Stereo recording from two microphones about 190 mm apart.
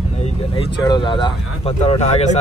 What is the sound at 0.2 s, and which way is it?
Speech, 30° left (ahead or behind).